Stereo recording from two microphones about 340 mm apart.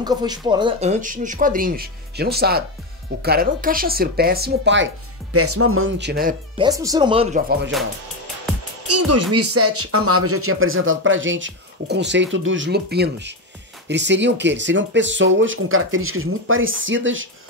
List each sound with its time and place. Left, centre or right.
0.0 s speech: centre; by 4.8 s right
5.3 s speech: right
6.5 s speech: centre
8.8 s speech: right